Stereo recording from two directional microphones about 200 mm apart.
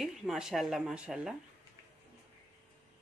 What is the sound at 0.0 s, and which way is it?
Speech, centre (ahead or behind).